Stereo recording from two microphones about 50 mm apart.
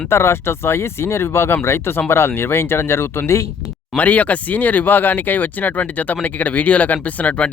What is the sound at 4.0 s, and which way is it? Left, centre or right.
Speech, left.